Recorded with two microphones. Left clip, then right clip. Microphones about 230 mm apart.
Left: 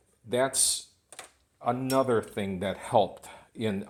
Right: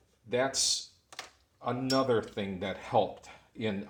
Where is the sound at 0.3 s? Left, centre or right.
Left.